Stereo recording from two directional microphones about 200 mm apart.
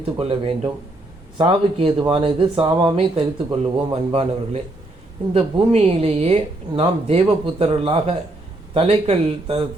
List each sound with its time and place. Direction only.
0.0 s speech: 25° right (ahead or behind)